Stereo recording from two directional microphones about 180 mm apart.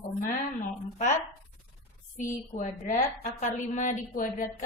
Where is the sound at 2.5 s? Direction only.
45° left (ahead or behind).